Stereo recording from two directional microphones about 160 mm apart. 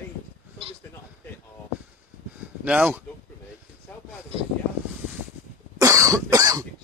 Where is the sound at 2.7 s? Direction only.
10° right (ahead or behind).